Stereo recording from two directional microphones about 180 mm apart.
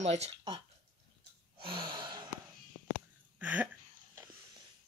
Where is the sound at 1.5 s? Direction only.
30° right (ahead or behind).